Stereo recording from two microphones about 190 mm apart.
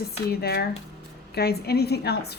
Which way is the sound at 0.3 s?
55° left (ahead or behind).